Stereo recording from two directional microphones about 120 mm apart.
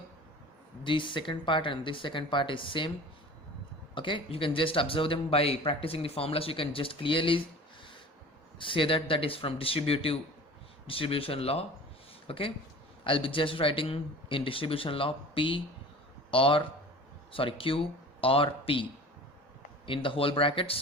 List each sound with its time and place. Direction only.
0.9 s speech: 45° left (ahead or behind)
3.9 s speech: 45° left (ahead or behind)
8.5 s speech: 45° left (ahead or behind)